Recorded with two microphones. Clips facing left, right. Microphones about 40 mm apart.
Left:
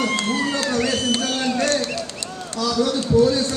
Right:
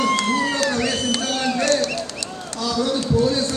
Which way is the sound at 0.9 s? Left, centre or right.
Left.